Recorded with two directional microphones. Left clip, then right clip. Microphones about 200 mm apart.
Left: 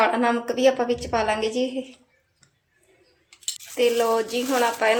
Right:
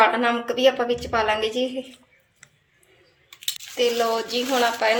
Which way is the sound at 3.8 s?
10° left (ahead or behind).